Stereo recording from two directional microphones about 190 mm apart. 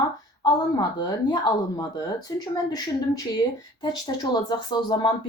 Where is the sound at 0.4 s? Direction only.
20° left (ahead or behind).